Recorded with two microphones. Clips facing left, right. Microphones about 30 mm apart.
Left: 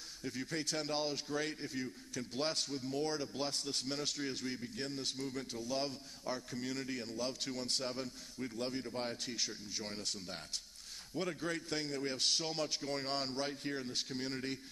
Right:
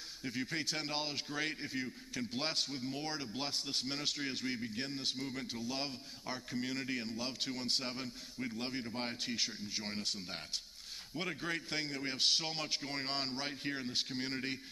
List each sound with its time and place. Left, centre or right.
0.2 s a man's voice: right